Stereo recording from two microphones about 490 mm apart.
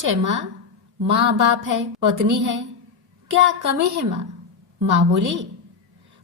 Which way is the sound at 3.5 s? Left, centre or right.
Right.